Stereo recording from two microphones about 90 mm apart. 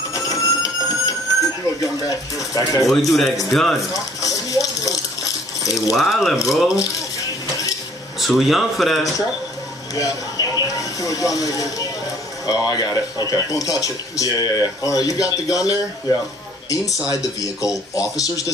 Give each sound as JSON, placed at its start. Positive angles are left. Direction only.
{"t": 0.1, "sound": "a sound", "side_deg": 40}
{"t": 1.8, "sound": "speech", "side_deg": 40}
{"t": 2.9, "sound": "speech", "side_deg": 0}
{"t": 3.9, "sound": "a sound", "side_deg": 40}
{"t": 5.9, "sound": "speech", "side_deg": 0}
{"t": 8.2, "sound": "speech", "side_deg": 0}
{"t": 9.9, "sound": "speech", "side_deg": 45}